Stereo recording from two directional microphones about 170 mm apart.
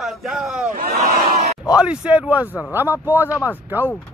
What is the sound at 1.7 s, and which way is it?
Speech, 5° right (ahead or behind).